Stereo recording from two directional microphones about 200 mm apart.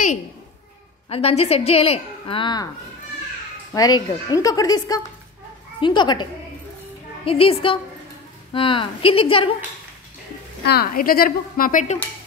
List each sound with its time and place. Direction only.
1.0 s a woman's voice: 30° left (ahead or behind)
3.7 s a woman's voice: 20° left (ahead or behind)
7.2 s a woman's voice: 30° left (ahead or behind)
10.6 s a woman's voice: 50° left (ahead or behind)